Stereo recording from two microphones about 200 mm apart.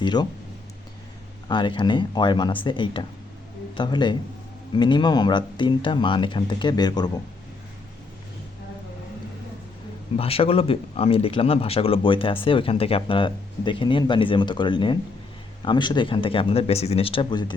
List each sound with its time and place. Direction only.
0.0 s speech: 20° left (ahead or behind)
1.5 s speech: 25° left (ahead or behind)
10.2 s speech: 30° left (ahead or behind)